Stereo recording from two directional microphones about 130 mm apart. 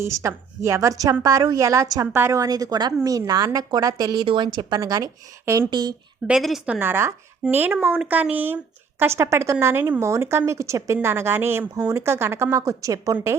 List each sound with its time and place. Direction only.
0.0 s speech: 20° right (ahead or behind)
6.2 s a woman's voice: 5° right (ahead or behind)
6.7 s speech: 15° right (ahead or behind)